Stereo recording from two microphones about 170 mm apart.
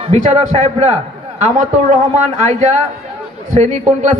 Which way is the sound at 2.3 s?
45° right (ahead or behind).